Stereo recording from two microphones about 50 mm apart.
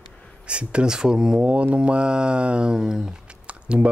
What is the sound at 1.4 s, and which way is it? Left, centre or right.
Speech, right.